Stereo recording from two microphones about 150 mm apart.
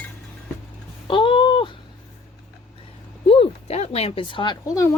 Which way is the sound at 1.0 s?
35° left (ahead or behind).